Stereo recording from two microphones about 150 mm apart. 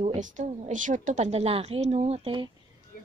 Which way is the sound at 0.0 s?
55° right (ahead or behind).